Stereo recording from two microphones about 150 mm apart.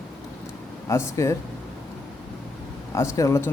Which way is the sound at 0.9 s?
20° left (ahead or behind).